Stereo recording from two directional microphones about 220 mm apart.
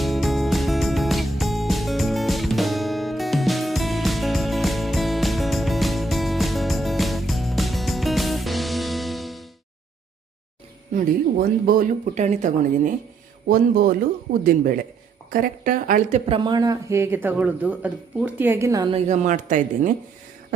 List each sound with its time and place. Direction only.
0.0 s music: centre (ahead or behind)
11.6 s speech: 40° right (ahead or behind)